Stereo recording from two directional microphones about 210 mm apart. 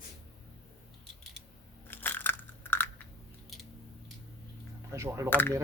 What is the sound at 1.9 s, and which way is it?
Crushing, 10° left (ahead or behind).